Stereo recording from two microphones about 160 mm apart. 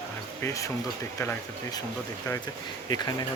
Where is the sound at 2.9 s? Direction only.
25° left (ahead or behind).